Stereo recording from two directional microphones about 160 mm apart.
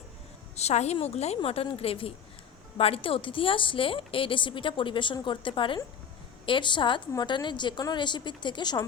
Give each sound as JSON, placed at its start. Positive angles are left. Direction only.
{"t": 0.5, "sound": "a woman's voice", "side_deg": 45}